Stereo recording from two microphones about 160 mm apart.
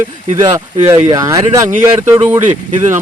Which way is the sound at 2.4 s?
45° right (ahead or behind).